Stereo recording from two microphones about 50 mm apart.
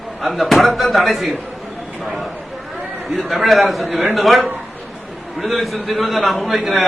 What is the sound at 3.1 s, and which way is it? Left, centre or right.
A man's voice, centre.